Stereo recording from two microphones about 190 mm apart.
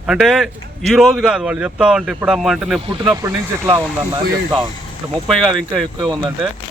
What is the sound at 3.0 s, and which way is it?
Speech, 15° right (ahead or behind).